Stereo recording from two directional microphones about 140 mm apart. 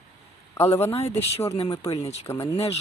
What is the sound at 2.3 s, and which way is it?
Speech, 20° left (ahead or behind).